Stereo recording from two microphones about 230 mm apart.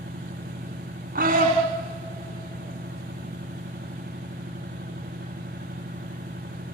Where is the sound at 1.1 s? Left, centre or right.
Right.